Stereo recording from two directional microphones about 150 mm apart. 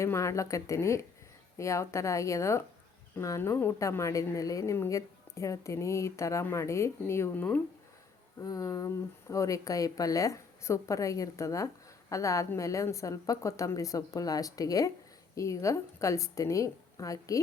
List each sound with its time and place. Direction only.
0.0 s a woman's voice: 20° left (ahead or behind)
8.4 s a woman's voice: 25° left (ahead or behind)